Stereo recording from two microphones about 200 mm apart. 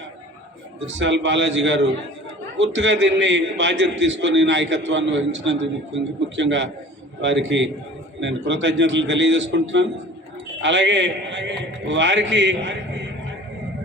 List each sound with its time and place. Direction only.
0.9 s a man's voice: 65° right (ahead or behind)